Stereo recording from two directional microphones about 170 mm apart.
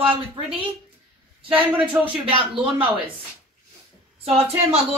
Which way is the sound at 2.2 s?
30° right (ahead or behind).